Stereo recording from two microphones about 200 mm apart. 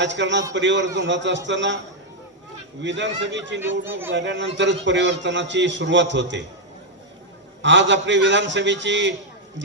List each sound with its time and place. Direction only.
0.0 s a man's voice: 60° right (ahead or behind)
2.8 s a man's voice: 65° right (ahead or behind)
7.6 s a man's voice: 65° right (ahead or behind)